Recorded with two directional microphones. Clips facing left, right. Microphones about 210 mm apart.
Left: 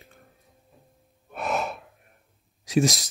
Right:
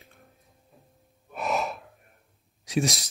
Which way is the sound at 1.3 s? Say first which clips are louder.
Even; centre (ahead or behind).